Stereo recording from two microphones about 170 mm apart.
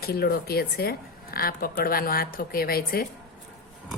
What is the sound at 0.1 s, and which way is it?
A woman's voice, 65° left (ahead or behind).